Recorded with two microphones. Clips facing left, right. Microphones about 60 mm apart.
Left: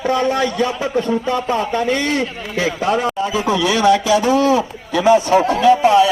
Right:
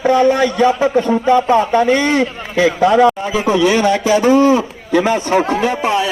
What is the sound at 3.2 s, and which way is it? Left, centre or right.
Speech, right.